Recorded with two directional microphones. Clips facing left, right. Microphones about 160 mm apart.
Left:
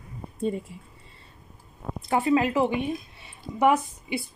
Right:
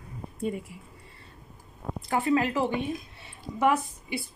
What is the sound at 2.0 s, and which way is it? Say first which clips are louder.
Speech: left 3 dB; 20° left (ahead or behind).